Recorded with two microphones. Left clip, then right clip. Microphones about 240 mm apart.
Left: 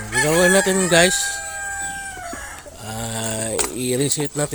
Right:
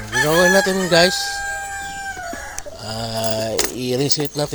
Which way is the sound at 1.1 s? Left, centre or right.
Left.